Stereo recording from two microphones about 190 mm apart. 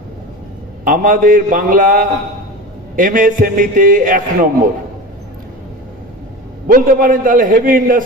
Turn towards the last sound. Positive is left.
turn(degrees=-45)  # may be behind; listen again after turning